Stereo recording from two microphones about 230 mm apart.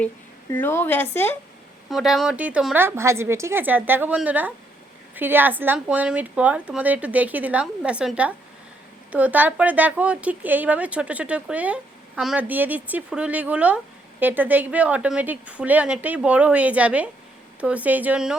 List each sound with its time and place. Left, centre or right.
0.5 s a woman's voice: centre